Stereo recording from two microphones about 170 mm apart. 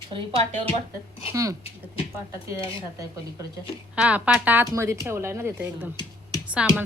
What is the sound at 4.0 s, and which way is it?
A woman's voice, 10° right (ahead or behind).